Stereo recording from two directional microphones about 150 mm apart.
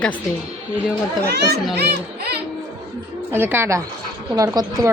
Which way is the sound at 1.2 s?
90° right.